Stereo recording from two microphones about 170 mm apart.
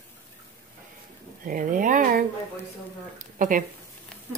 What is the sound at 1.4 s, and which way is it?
Speech, 55° right (ahead or behind).